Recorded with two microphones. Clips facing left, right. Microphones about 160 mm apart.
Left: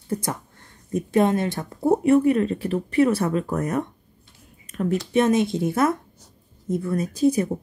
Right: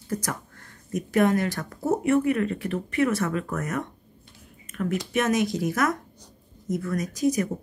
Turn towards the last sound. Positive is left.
turn(degrees=30)  # may be behind; listen again after turning